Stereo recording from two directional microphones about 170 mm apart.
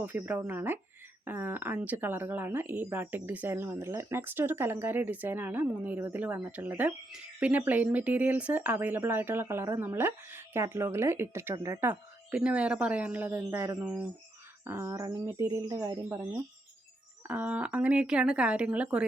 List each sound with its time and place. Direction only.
0.0 s speech: 10° right (ahead or behind)